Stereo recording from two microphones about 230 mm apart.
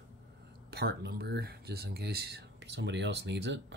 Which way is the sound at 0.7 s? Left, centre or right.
Right.